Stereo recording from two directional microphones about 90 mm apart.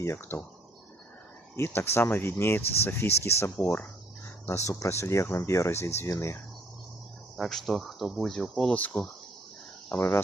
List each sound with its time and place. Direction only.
0.0 s speech: 30° left (ahead or behind)
1.5 s speech: 25° left (ahead or behind)
7.3 s speech: centre (ahead or behind)
8.7 s insect: 15° left (ahead or behind)
9.9 s speech: 25° left (ahead or behind)